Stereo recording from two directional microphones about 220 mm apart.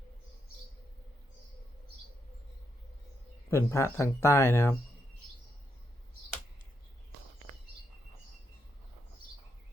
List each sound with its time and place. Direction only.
3.5 s speech: 10° left (ahead or behind)